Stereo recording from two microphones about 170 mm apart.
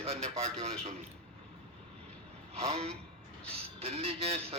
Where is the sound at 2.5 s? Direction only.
40° right (ahead or behind).